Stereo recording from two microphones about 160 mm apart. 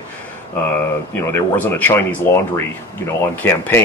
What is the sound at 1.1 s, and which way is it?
Speech, 10° left (ahead or behind).